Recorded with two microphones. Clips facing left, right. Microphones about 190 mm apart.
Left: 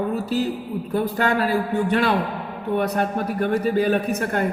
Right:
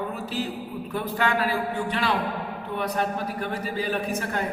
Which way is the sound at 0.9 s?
40° left (ahead or behind).